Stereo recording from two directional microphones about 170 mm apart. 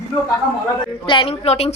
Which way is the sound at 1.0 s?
30° left (ahead or behind).